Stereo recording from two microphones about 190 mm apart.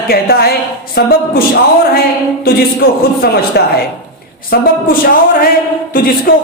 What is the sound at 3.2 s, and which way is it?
Speech, 55° left (ahead or behind).